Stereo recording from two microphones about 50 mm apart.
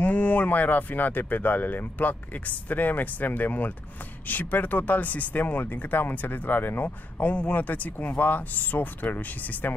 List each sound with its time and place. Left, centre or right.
0.0 s speech: left